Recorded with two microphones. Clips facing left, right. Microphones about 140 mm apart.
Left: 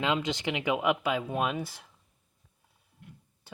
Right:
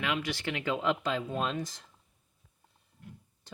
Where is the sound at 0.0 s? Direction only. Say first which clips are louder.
Left 4 dB; 20° left (ahead or behind).